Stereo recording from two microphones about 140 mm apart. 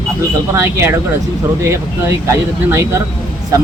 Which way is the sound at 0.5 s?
15° right (ahead or behind).